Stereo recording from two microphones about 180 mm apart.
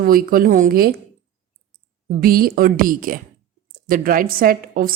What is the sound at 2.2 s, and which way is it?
A woman's voice, 55° right (ahead or behind).